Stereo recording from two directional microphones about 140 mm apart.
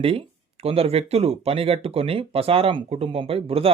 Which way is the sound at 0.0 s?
40° right (ahead or behind).